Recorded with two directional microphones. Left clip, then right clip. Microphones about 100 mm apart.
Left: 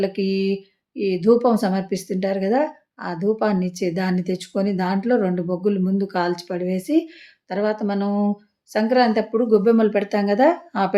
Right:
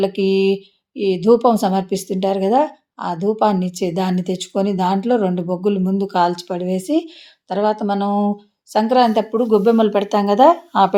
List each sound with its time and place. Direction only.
0.0 s speech: 20° right (ahead or behind)